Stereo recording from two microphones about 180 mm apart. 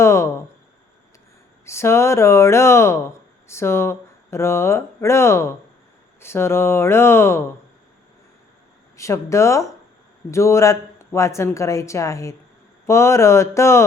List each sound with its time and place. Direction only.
0.0 s a sound: 15° left (ahead or behind)
1.6 s speech: 15° left (ahead or behind)
9.0 s speech: 15° left (ahead or behind)